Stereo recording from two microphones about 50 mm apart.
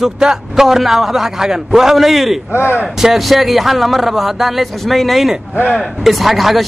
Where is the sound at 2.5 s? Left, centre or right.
Left.